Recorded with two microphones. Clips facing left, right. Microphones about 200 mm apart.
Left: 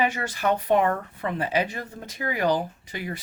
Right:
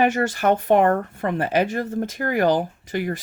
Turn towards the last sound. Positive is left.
turn(degrees=-45)  # may be behind; listen again after turning